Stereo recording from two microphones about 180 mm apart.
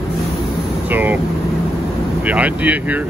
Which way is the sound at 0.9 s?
10° right (ahead or behind).